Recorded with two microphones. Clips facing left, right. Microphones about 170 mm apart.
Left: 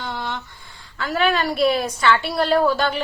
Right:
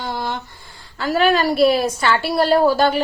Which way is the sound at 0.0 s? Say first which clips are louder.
Right 3 dB; 40° right (ahead or behind).